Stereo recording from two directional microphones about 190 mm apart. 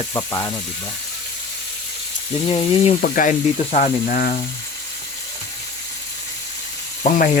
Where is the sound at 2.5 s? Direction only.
25° left (ahead or behind).